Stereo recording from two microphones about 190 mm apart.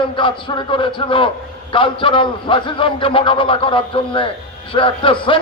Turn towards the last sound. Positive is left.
turn(degrees=25)  # may be behind; listen again after turning